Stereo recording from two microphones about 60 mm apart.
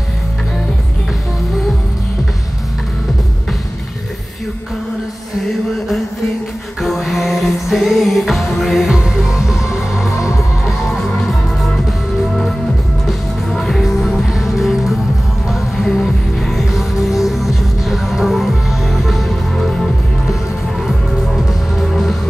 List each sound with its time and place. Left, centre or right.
6.8 s music: centre
10.1 s music: left
11.0 s music: centre
13.0 s music: centre
21.7 s music: centre